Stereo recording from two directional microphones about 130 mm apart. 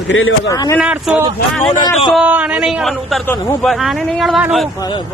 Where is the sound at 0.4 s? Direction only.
30° left (ahead or behind).